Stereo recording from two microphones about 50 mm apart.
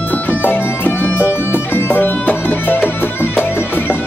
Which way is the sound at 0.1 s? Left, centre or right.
Left.